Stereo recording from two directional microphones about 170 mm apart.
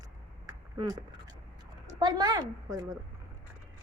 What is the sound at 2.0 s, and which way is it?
Speech, 25° right (ahead or behind).